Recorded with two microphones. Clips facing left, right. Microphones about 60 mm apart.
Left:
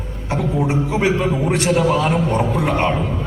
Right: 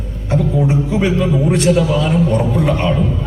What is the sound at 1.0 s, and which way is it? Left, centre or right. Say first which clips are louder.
A man's voice: right 2 dB; left.